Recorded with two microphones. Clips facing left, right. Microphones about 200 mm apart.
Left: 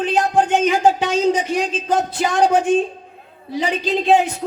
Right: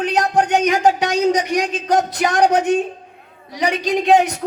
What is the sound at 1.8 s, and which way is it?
Speech, 70° right (ahead or behind).